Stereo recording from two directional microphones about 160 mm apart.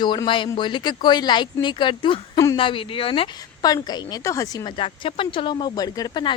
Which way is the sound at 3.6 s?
25° left (ahead or behind).